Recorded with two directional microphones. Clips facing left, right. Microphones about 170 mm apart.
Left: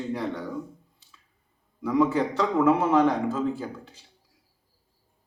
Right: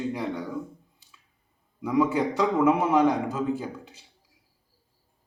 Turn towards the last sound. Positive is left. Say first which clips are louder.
# even
turn(degrees=-15)  # may be behind; listen again after turning